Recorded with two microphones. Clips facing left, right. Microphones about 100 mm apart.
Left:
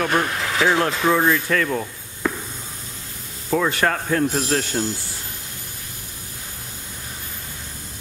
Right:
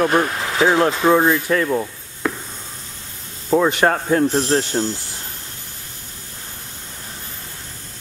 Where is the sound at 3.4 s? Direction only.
20° right (ahead or behind).